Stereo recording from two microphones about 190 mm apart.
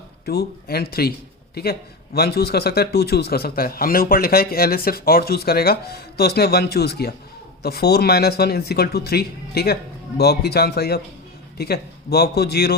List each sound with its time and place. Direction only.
0.3 s speech: 55° left (ahead or behind)
2.1 s speech: 55° left (ahead or behind)